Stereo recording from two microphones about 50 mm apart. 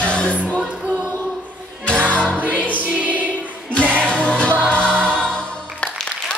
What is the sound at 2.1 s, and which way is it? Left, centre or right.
Music, left.